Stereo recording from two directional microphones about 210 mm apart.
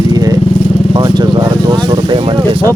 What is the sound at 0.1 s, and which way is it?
Vehicle, 20° right (ahead or behind).